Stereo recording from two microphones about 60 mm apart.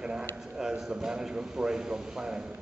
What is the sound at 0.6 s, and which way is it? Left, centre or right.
A man's voice, centre.